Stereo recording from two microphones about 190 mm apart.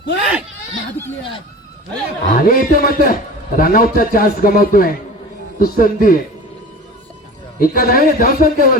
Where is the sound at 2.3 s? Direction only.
50° left (ahead or behind).